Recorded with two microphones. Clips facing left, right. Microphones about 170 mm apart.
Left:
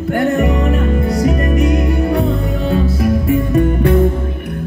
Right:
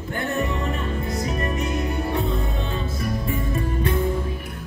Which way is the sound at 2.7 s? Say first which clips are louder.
Left 15 dB; 70° left (ahead or behind).